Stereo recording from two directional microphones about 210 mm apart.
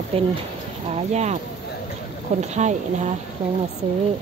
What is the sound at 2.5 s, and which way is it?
Speech, 35° right (ahead or behind).